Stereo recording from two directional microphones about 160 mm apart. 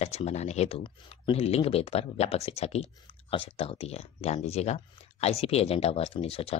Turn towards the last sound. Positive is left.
turn(degrees=35)  # may be behind; listen again after turning